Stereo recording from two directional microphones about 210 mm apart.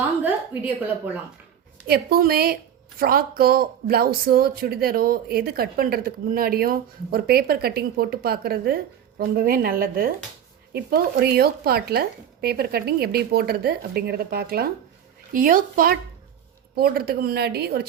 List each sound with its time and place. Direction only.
1.9 s speech: 45° right (ahead or behind)